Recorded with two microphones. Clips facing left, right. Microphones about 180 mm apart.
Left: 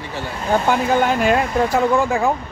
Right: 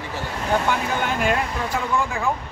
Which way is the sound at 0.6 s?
40° left (ahead or behind).